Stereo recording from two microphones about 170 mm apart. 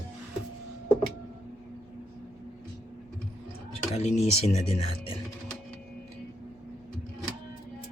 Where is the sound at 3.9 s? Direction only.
40° left (ahead or behind).